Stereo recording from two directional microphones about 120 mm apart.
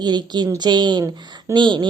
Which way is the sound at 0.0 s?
35° right (ahead or behind).